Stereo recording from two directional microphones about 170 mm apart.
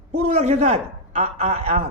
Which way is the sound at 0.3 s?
40° right (ahead or behind).